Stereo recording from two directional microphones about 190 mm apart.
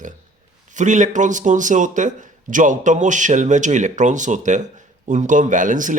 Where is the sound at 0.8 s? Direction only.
40° right (ahead or behind).